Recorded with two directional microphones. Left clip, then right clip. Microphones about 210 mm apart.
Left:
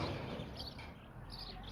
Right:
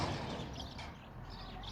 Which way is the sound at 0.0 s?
50° right (ahead or behind).